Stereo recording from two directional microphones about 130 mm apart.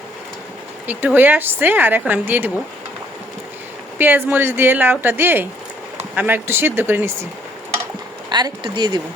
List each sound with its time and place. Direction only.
0.9 s a woman's voice: 15° right (ahead or behind)
3.9 s a woman's voice: 15° right (ahead or behind)
8.3 s speech: 35° right (ahead or behind)